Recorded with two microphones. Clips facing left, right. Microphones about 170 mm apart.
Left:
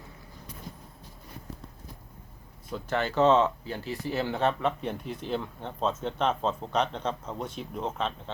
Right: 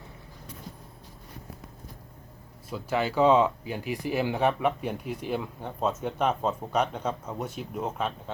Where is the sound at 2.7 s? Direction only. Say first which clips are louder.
Right 2 dB; 10° right (ahead or behind).